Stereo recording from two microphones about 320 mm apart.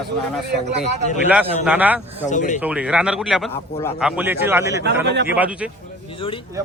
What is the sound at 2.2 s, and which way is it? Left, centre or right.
Speech, left.